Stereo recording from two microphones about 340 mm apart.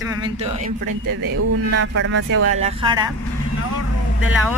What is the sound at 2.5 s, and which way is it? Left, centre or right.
Speech, centre.